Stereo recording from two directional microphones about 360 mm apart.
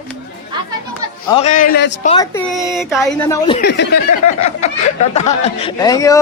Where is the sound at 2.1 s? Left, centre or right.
Centre.